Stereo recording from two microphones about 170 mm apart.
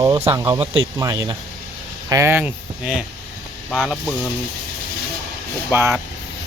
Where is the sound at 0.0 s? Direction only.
25° right (ahead or behind); by 3.0 s 5° right (ahead or behind).